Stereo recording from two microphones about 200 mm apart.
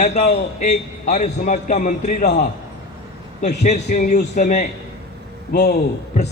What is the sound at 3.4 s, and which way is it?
A man's voice, 35° left (ahead or behind).